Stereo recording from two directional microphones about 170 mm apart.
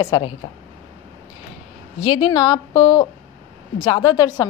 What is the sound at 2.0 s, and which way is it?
A woman's voice, 30° left (ahead or behind).